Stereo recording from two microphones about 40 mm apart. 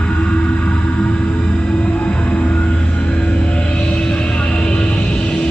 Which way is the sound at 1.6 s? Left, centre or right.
Left.